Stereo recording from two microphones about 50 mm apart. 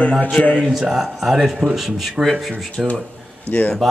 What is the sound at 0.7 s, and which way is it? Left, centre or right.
A man's voice, centre.